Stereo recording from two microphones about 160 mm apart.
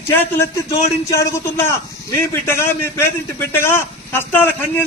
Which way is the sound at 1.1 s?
20° left (ahead or behind).